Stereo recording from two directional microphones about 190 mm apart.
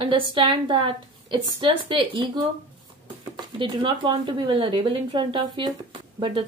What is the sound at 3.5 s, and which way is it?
Speech, 25° right (ahead or behind).